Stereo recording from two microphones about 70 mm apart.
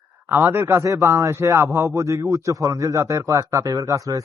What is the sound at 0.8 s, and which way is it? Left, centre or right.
A man's voice, right.